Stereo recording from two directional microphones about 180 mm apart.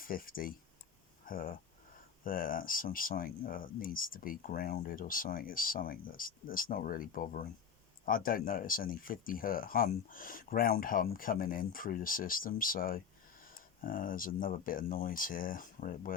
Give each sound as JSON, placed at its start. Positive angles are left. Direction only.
{"t": 0.0, "sound": "speech", "side_deg": 50}